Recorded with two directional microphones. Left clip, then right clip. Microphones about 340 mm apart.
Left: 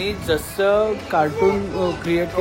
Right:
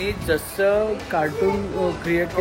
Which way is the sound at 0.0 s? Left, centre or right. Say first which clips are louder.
Left 1 dB; centre.